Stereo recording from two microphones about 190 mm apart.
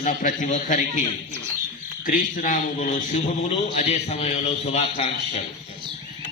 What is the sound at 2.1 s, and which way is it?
Speech, 45° left (ahead or behind).